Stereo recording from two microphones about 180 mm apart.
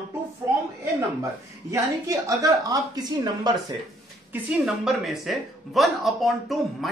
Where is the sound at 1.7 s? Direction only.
15° right (ahead or behind).